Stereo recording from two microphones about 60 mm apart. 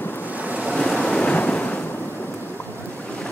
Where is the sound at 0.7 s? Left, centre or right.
Centre.